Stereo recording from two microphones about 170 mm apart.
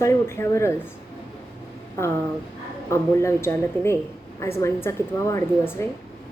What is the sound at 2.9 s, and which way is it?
A woman's voice, 15° left (ahead or behind).